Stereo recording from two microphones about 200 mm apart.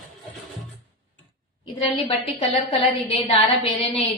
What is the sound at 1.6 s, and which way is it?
A woman's voice, 30° left (ahead or behind).